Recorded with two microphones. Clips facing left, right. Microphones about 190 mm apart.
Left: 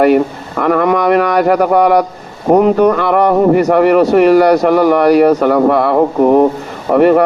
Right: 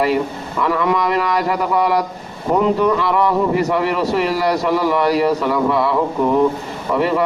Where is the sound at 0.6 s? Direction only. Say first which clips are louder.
Left 6 dB; 55° left (ahead or behind).